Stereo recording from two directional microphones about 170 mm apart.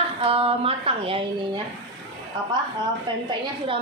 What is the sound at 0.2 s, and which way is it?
A woman's voice, 35° right (ahead or behind).